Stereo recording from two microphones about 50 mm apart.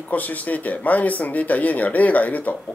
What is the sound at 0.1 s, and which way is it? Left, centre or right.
Speech, left.